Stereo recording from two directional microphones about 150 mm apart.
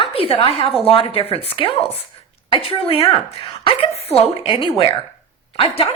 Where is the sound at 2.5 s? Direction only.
40° left (ahead or behind).